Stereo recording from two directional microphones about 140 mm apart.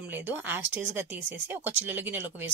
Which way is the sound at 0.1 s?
10° right (ahead or behind).